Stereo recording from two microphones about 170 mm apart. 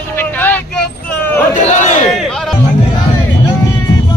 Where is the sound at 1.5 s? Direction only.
45° left (ahead or behind).